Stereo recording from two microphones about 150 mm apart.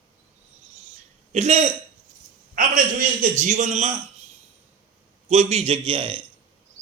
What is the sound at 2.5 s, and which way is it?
A man's voice, 65° right (ahead or behind).